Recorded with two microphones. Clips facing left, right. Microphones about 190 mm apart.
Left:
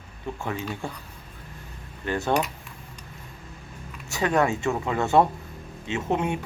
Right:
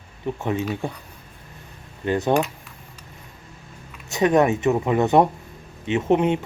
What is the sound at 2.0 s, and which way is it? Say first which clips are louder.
Speech: right 5 dB; 15° right (ahead or behind).